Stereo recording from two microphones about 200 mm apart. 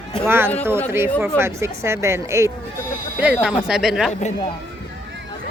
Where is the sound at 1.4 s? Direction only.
15° right (ahead or behind).